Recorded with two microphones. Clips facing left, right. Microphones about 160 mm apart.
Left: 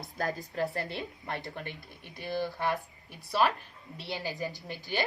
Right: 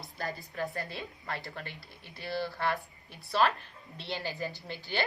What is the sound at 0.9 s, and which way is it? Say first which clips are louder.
Speech: left 2 dB; 20° left (ahead or behind).